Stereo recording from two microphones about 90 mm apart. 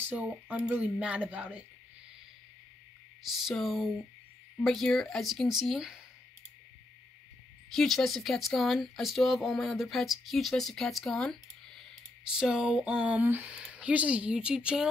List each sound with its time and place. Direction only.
0.0 s speech: 15° right (ahead or behind)
3.4 s speech: centre (ahead or behind)
4.9 s speech: 5° left (ahead or behind)
7.7 s speech: 5° left (ahead or behind)
12.3 s speech: 5° right (ahead or behind)